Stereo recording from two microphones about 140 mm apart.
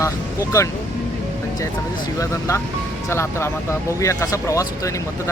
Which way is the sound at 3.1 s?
20° left (ahead or behind).